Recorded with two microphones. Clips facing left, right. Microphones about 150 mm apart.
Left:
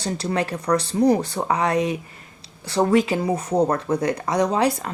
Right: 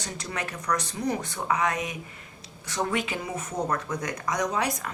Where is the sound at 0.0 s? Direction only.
35° left (ahead or behind).